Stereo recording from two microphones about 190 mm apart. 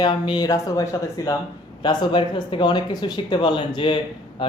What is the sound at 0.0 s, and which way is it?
Speech, 25° left (ahead or behind).